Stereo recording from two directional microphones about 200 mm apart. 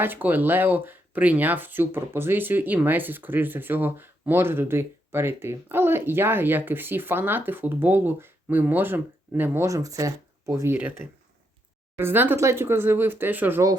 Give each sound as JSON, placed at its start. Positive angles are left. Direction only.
{"t": 0.0, "sound": "speech", "side_deg": -10}